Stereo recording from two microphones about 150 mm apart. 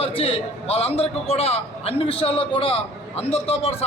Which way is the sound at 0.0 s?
40° left (ahead or behind).